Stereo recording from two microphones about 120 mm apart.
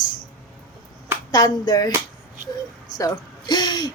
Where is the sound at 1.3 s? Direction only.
30° left (ahead or behind).